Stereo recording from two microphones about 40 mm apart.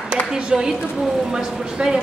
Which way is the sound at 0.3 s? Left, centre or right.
Centre.